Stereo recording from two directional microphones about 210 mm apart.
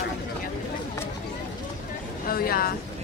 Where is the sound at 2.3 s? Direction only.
45° left (ahead or behind).